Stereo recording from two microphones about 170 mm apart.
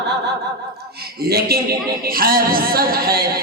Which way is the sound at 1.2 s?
65° right (ahead or behind).